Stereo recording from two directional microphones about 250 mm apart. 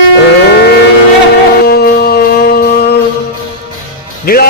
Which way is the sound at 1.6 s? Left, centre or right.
Left.